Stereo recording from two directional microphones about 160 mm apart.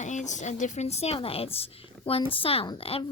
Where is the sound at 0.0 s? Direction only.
50° left (ahead or behind).